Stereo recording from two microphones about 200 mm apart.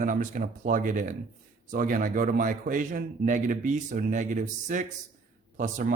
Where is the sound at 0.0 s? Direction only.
40° right (ahead or behind).